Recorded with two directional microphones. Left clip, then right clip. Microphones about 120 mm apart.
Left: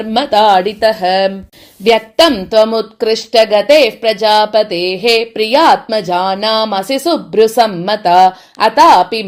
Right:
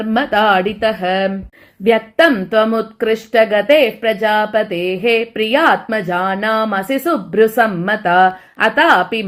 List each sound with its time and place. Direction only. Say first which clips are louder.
0.0 s speech: left 4 dB; 20° left (ahead or behind); by 9.2 s 35° left (ahead or behind)